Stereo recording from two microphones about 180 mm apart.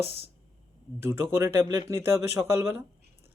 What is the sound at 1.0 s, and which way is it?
Speech, 15° right (ahead or behind).